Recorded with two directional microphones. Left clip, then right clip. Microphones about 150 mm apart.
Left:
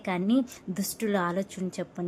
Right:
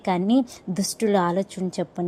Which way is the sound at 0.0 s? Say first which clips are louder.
Right 6 dB; 30° right (ahead or behind).